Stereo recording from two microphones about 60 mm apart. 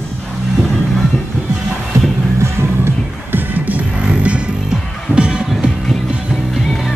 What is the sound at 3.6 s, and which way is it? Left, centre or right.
Music, right.